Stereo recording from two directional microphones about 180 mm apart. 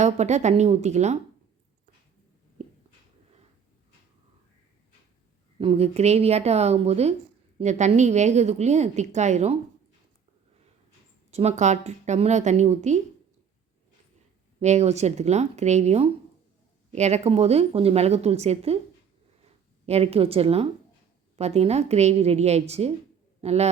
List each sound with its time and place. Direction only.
0.0 s a woman's voice: 40° right (ahead or behind)
5.5 s a woman's voice: 35° right (ahead or behind)
11.3 s a woman's voice: 35° right (ahead or behind)
14.6 s a woman's voice: 40° right (ahead or behind)
19.8 s a woman's voice: 35° right (ahead or behind)